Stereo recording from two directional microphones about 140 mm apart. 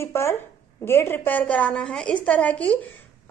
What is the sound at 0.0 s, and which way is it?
A woman's voice, 20° left (ahead or behind).